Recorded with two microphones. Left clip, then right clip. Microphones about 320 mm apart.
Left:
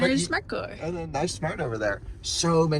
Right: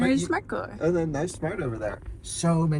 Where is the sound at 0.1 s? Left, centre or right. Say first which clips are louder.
Even; centre.